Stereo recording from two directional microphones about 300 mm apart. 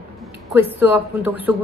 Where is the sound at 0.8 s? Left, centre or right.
Centre.